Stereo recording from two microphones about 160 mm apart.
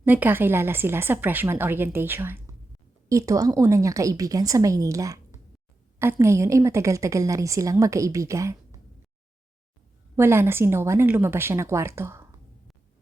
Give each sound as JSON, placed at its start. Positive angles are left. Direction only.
{"t": 0.0, "sound": "a woman's voice", "side_deg": -10}
{"t": 10.2, "sound": "a woman's voice", "side_deg": -15}